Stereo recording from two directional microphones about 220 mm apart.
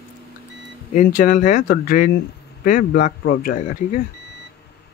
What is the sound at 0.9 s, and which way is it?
Speech, 35° left (ahead or behind).